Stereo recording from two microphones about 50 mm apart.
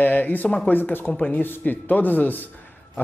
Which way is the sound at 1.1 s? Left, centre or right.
Left.